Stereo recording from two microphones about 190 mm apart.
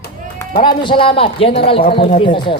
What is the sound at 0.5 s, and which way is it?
A man's voice, 25° left (ahead or behind).